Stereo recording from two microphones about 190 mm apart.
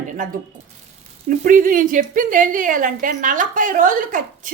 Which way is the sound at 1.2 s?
45° right (ahead or behind).